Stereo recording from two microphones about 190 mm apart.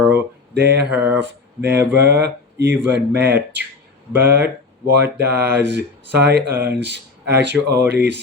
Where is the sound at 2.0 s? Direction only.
60° right (ahead or behind).